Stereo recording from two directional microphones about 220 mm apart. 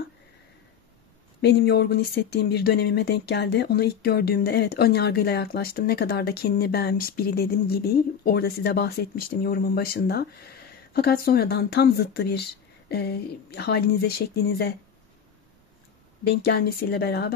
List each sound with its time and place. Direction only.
1.4 s speech: 50° left (ahead or behind)
16.3 s speech: 45° left (ahead or behind)